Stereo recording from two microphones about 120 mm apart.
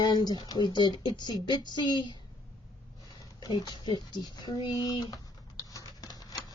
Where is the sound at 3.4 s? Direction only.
35° left (ahead or behind).